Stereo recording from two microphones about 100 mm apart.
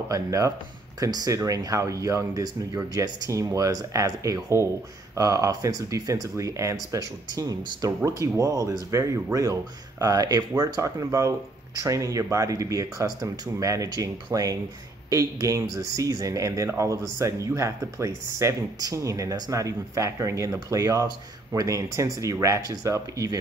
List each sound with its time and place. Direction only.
0.1 s speech: 35° right (ahead or behind)